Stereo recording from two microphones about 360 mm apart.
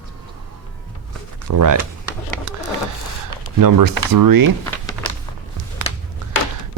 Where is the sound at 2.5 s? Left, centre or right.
Right.